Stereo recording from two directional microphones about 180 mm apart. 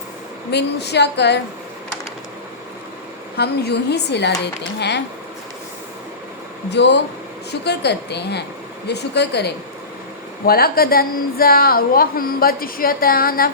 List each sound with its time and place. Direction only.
0.5 s a woman's voice: 70° left (ahead or behind)
3.3 s a woman's voice: 65° left (ahead or behind)
6.7 s a woman's voice: 70° left (ahead or behind)
10.4 s a woman's voice: 55° left (ahead or behind)